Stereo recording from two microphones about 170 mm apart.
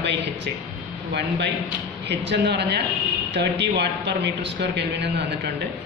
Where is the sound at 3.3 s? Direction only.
90° right.